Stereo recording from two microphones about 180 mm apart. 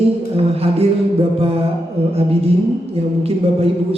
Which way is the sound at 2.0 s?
35° right (ahead or behind).